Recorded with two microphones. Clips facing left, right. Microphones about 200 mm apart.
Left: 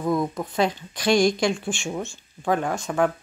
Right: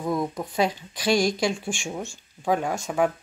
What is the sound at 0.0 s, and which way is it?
Speech, 10° right (ahead or behind).